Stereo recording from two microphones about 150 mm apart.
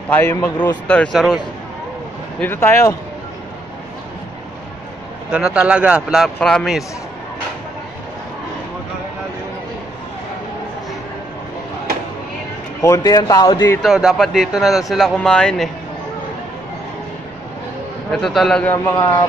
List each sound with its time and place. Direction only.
0.1 s a man's voice: 15° left (ahead or behind)
2.4 s a man's voice: 15° left (ahead or behind)
5.3 s a man's voice: 5° right (ahead or behind)
12.8 s speech: 20° left (ahead or behind)
13.8 s speech: centre (ahead or behind)
18.1 s speech: centre (ahead or behind)
18.9 s speech: 25° left (ahead or behind)